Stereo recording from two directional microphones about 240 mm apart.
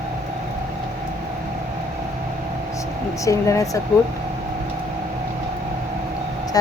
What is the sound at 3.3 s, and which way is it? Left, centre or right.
Speech, centre.